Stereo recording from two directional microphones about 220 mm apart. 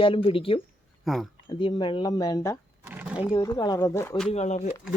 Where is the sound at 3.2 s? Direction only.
15° left (ahead or behind).